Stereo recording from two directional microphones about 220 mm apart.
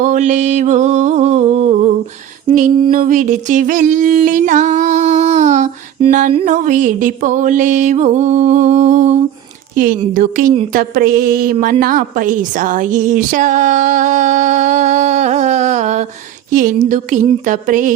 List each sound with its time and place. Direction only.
0.0 s music: 35° right (ahead or behind)
2.9 s music: 35° right (ahead or behind)
11.6 s a woman's voice: 40° right (ahead or behind)
16.5 s music: 40° right (ahead or behind)